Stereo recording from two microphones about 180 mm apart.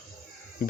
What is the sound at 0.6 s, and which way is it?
Speech, 55° left (ahead or behind).